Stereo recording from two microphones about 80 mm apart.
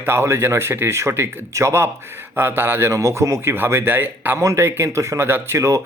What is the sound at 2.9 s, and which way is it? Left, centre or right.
Speech, right.